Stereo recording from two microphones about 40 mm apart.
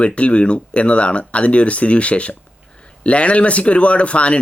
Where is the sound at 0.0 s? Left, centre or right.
Left.